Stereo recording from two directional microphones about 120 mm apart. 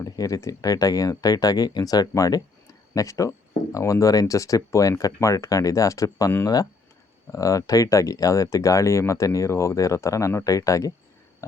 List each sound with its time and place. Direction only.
0.0 s speech: 30° left (ahead or behind)